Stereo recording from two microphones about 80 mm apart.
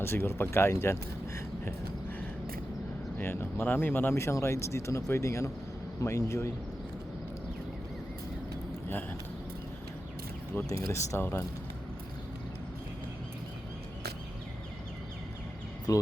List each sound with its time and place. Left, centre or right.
0.0 s speech: left
3.2 s speech: left
10.7 s speech: left
11.2 s speech: left
15.9 s speech: left